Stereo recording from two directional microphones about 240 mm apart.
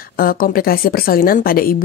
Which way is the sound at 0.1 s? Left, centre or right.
Left.